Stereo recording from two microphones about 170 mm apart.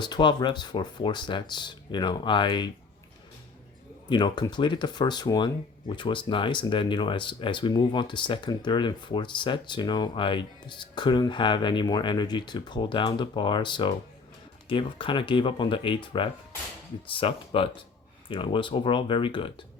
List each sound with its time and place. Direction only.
0.0 s speech: 25° left (ahead or behind)
4.1 s speech: 25° left (ahead or behind)